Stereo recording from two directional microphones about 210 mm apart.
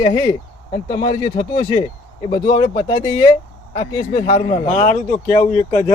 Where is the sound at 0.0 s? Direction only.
20° left (ahead or behind).